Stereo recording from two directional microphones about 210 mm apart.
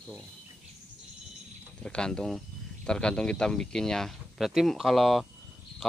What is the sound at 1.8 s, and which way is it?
Speech, 5° left (ahead or behind).